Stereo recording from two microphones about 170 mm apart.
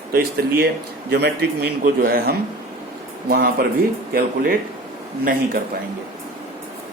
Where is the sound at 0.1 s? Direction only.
65° right (ahead or behind).